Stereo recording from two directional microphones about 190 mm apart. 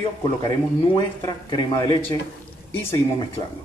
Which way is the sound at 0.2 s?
20° left (ahead or behind).